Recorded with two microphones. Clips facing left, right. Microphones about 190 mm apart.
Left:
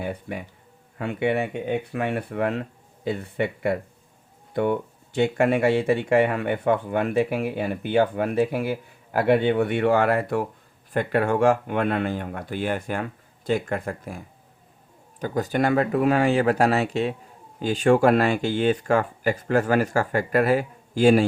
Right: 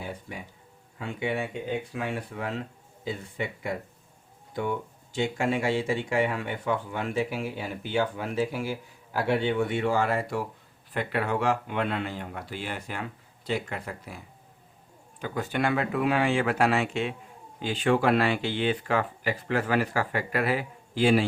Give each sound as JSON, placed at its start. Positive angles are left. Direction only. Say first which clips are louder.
{"t": 0.0, "sound": "speech", "louder": "left 7 dB", "side_deg": 60}
{"t": 10.9, "sound": "speech", "louder": "left 6 dB", "side_deg": 45}